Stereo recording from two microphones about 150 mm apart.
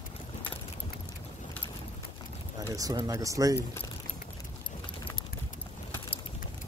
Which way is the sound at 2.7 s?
25° right (ahead or behind).